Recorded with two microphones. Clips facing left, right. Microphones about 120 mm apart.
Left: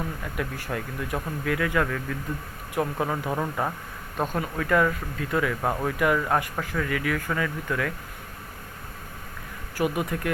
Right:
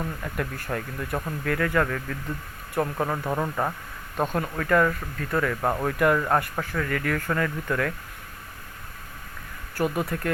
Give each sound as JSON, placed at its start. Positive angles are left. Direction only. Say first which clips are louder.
{"t": 0.0, "sound": "speech", "louder": "right 1 dB", "side_deg": 5}
{"t": 6.4, "sound": "speech", "louder": "even", "side_deg": 15}
{"t": 9.7, "sound": "speech", "louder": "even", "side_deg": 10}